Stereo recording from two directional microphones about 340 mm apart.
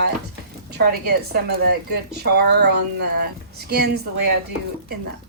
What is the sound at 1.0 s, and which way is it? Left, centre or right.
A woman's voice, right.